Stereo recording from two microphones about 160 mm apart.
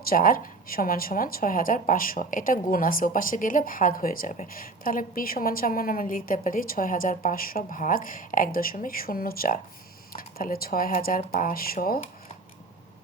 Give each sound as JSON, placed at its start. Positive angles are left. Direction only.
{"t": 0.0, "sound": "a woman's voice", "side_deg": 65}